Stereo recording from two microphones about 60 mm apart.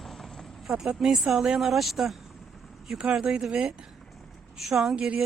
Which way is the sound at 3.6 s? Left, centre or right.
Centre.